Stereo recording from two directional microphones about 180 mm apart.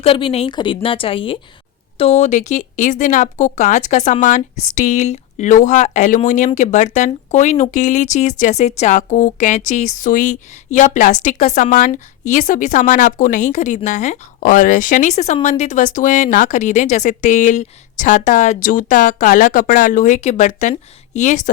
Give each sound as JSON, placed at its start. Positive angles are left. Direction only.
{"t": 0.0, "sound": "a woman's voice", "side_deg": 30}